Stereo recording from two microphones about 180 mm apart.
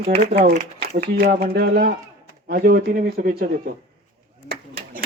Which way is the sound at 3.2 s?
45° right (ahead or behind).